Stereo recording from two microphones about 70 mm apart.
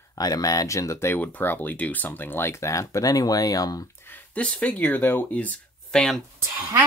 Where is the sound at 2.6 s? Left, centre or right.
Left.